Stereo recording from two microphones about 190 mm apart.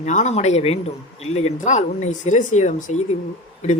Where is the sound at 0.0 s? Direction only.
40° left (ahead or behind).